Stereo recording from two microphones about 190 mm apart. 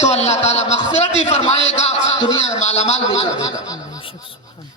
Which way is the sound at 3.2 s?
15° left (ahead or behind).